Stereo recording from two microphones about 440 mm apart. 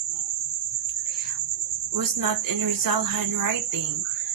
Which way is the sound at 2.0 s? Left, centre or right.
Right.